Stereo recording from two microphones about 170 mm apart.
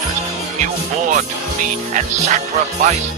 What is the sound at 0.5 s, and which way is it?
Speech, 45° right (ahead or behind).